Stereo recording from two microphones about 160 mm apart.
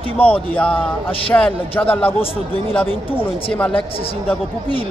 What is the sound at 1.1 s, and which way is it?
Speech, 35° left (ahead or behind).